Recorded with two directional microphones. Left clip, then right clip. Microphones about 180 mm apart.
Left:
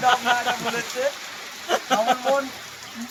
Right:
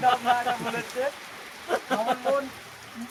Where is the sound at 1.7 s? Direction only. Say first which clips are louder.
Left 5 dB; 15° left (ahead or behind).